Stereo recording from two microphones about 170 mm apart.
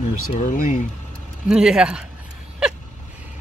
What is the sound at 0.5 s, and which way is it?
Speech, 50° left (ahead or behind).